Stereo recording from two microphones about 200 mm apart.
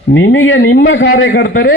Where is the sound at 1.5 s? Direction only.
50° left (ahead or behind).